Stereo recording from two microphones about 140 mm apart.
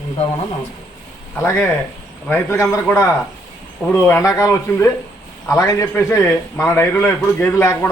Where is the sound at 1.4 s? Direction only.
15° left (ahead or behind).